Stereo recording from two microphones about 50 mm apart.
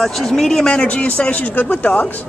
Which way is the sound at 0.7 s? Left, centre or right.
Left.